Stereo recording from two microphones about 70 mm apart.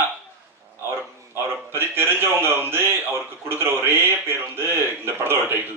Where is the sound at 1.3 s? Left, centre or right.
Right.